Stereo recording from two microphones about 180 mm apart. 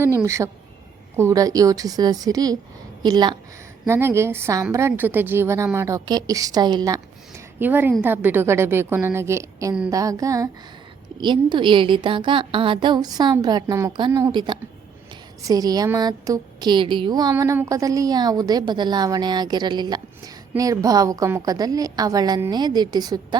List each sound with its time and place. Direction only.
0.0 s a woman's voice: 15° right (ahead or behind)